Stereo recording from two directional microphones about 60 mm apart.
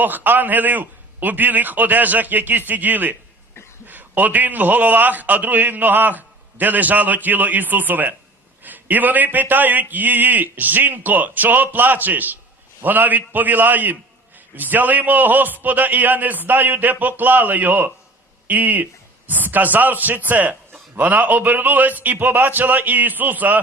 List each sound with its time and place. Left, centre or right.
0.0 s a man's voice: right